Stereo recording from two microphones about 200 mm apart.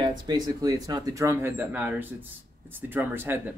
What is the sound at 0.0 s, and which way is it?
Speech, 20° right (ahead or behind).